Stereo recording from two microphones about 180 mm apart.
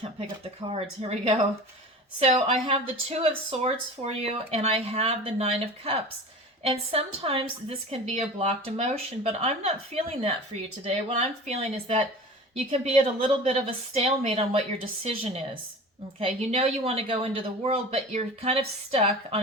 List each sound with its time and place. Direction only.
0.7 s speech: 35° right (ahead or behind)
16.2 s speech: 35° right (ahead or behind)